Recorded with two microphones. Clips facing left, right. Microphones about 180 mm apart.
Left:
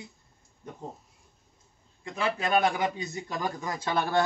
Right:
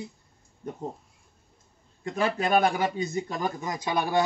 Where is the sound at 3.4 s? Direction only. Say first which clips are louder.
Right 2 dB; 20° right (ahead or behind).